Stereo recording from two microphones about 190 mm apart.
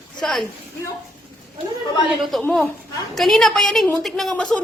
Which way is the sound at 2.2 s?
Centre (ahead or behind).